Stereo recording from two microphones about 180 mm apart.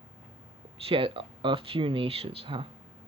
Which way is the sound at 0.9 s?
30° right (ahead or behind).